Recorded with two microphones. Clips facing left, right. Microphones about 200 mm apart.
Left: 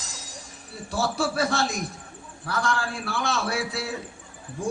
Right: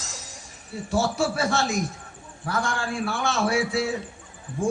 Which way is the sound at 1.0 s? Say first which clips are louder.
Right 1 dB; 60° left (ahead or behind).